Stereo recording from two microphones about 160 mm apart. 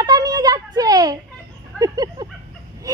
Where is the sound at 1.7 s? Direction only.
25° right (ahead or behind).